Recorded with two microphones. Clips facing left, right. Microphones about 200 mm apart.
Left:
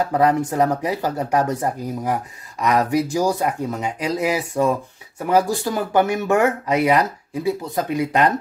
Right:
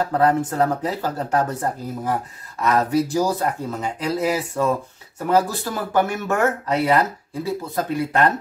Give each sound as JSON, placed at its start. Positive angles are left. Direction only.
{"t": 0.1, "sound": "speech", "side_deg": 15}